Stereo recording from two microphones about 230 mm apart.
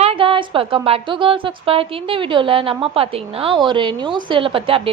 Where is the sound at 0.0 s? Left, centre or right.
Right.